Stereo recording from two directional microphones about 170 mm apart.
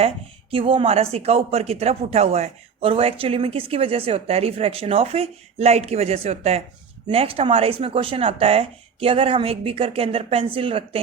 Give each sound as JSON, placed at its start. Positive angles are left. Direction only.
{"t": 0.5, "sound": "speech", "side_deg": -30}